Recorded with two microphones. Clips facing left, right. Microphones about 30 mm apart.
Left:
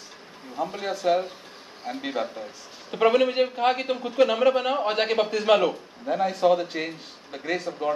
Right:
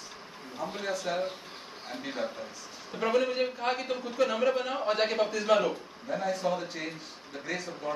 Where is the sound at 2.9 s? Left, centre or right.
Left.